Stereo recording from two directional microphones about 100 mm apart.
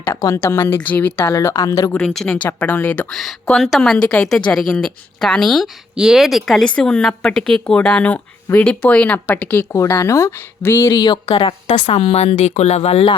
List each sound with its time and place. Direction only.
0.3 s speech: 25° left (ahead or behind)
1.3 s speech: 30° left (ahead or behind)
2.0 s speech: 5° left (ahead or behind)
3.1 s a woman's voice: centre (ahead or behind)
9.7 s speech: 30° left (ahead or behind)
10.9 s speech: 45° left (ahead or behind)
11.3 s a woman's voice: 65° left (ahead or behind); by 13.1 s 90° left